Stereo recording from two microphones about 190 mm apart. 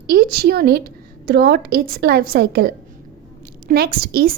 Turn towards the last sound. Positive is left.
turn(degrees=-50)  # may be behind; listen again after turning